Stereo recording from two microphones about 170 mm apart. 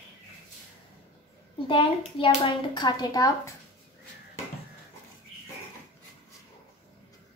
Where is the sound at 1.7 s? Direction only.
30° left (ahead or behind).